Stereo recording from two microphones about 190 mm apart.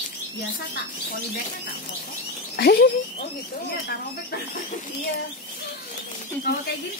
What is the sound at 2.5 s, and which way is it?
Speech, 60° left (ahead or behind).